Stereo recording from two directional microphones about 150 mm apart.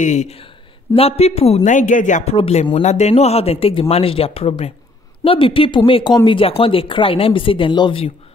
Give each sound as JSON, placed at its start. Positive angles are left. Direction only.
{"t": 0.0, "sound": "speech", "side_deg": 50}
{"t": 2.3, "sound": "speech", "side_deg": 40}